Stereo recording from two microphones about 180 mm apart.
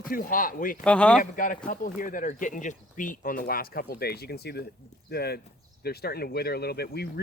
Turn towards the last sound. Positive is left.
turn(degrees=65)  # may be behind; listen again after turning